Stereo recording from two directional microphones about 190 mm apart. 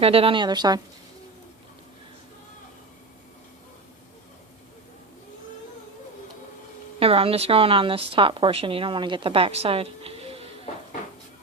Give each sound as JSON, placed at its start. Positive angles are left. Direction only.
{"t": 0.0, "sound": "a woman's voice", "side_deg": -30}
{"t": 7.0, "sound": "a woman's voice", "side_deg": -30}